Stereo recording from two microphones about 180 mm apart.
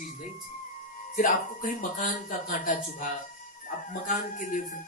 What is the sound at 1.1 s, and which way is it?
Speech, 45° left (ahead or behind).